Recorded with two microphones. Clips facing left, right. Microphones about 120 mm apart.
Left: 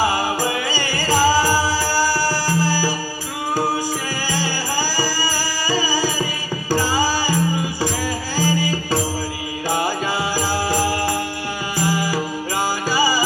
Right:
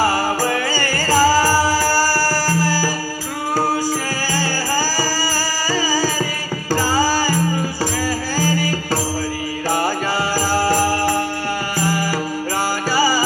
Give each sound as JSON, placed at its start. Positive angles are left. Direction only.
{"t": 0.0, "sound": "music", "side_deg": 15}
{"t": 4.3, "sound": "music", "side_deg": 15}